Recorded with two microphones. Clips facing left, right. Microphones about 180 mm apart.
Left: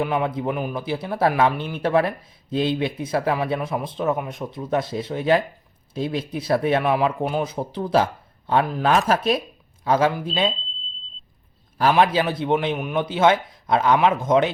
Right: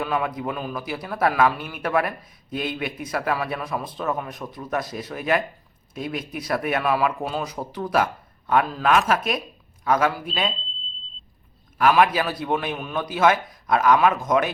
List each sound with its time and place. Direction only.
0.0 s a man's voice: 25° left (ahead or behind)
8.9 s a man's voice: 35° left (ahead or behind)
11.8 s a man's voice: 30° left (ahead or behind)